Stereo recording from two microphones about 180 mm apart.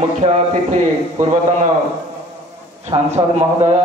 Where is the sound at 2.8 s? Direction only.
35° right (ahead or behind).